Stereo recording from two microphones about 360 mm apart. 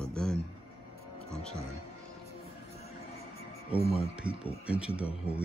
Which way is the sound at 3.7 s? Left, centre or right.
Centre.